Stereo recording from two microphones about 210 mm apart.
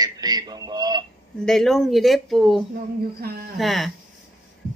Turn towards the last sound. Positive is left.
turn(degrees=0)  # may be behind; listen again after turning